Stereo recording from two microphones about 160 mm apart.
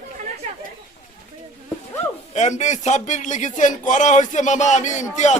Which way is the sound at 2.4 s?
45° left (ahead or behind).